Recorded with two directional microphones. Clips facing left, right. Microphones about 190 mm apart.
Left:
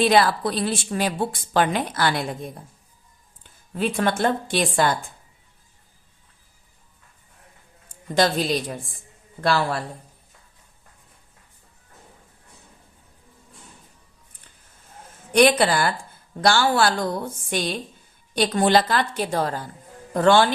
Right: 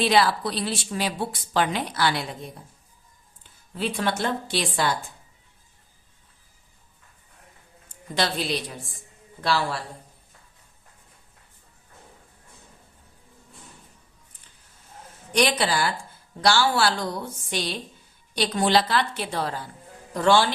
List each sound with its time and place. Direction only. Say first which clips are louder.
0.0 s a woman's voice: left 3 dB; 50° left (ahead or behind)
3.8 s a woman's voice: left 4 dB; 50° left (ahead or behind)
8.1 s a woman's voice: left 6 dB; 45° left (ahead or behind)
15.3 s a woman's voice: left 6 dB; 55° left (ahead or behind)